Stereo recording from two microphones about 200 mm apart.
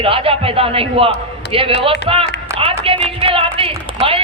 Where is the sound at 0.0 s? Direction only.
30° right (ahead or behind).